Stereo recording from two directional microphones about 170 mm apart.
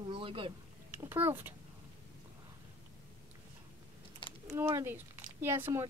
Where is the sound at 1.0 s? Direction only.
10° right (ahead or behind).